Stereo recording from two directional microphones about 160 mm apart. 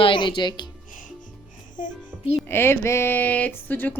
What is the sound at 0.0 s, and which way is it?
Speech, 30° left (ahead or behind).